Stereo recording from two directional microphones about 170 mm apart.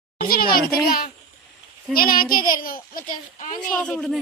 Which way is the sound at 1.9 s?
60° left (ahead or behind).